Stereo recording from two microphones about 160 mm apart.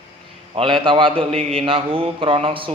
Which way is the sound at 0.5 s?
30° right (ahead or behind).